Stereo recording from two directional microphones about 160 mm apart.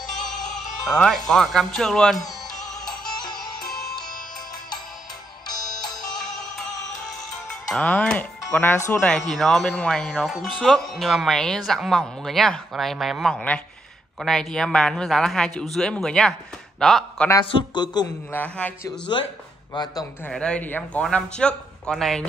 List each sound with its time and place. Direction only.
0.8 s speech: 5° left (ahead or behind)
2.8 s music: 25° left (ahead or behind)
3.3 s music: centre (ahead or behind)
6.0 s music: 5° left (ahead or behind)
7.7 s speech: 5° left (ahead or behind)
9.1 s speech: 5° left (ahead or behind)
17.5 s a man's voice: 30° left (ahead or behind)
18.3 s speech: 10° left (ahead or behind)
18.9 s a man's voice: 30° left (ahead or behind)
20.2 s speech: 5° left (ahead or behind)